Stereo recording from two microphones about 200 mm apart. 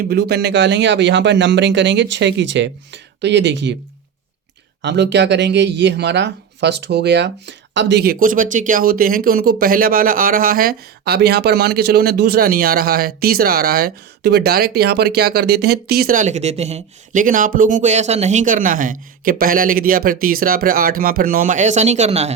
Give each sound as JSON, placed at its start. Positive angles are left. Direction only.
{"t": 0.1, "sound": "speech", "side_deg": -55}
{"t": 4.8, "sound": "speech", "side_deg": -60}